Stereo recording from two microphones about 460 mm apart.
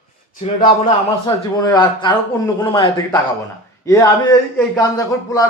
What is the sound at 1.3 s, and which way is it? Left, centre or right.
A man's voice, centre.